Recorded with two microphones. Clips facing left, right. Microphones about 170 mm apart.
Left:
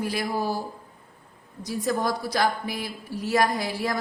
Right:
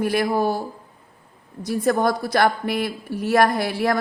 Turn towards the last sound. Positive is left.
turn(degrees=-65)  # may be behind; listen again after turning